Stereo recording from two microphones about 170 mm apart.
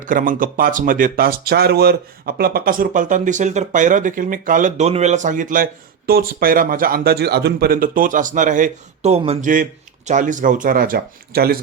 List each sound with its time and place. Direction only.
0.0 s speech: 50° right (ahead or behind); by 9.5 s 35° right (ahead or behind)
10.1 s speech: 50° right (ahead or behind); by 11.6 s 65° right (ahead or behind)